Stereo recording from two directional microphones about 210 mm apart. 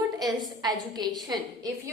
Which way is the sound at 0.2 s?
20° right (ahead or behind).